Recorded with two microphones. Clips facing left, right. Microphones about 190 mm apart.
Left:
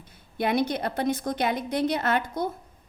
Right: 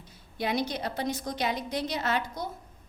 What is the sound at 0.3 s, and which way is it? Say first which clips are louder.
A woman's voice: left 5 dB; 55° left (ahead or behind).